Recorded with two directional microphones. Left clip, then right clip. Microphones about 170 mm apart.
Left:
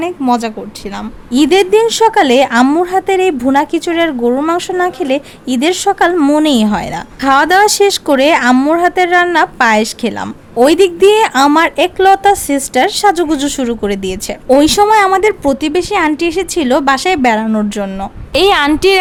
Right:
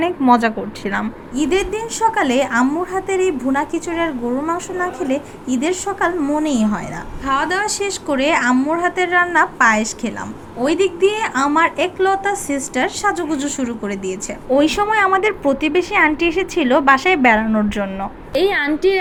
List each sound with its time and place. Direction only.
0.3 s a woman's voice: 15° left (ahead or behind)
1.3 s a woman's voice: 50° left (ahead or behind)
6.3 s a woman's voice: 45° left (ahead or behind); by 17.8 s 30° left (ahead or behind)
18.3 s a woman's voice: 40° left (ahead or behind)